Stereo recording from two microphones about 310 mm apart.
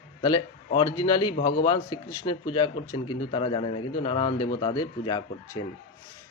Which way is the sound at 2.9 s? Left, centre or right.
Left.